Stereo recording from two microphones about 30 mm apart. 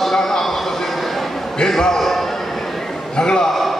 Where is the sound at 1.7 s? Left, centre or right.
Centre.